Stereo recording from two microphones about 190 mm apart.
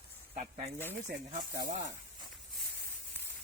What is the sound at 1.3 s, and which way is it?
Speech, 55° right (ahead or behind).